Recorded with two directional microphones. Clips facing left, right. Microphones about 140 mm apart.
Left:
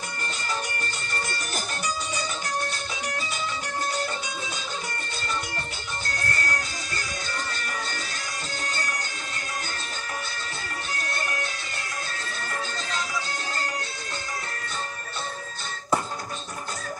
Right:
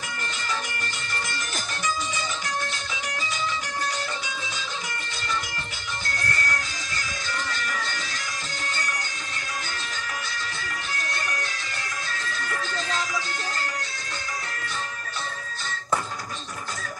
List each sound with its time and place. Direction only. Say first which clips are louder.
6.3 s music: even; 35° left (ahead or behind)
7.6 s music: right 1 dB; 35° left (ahead or behind)
12.2 s music: right 3 dB; 35° left (ahead or behind)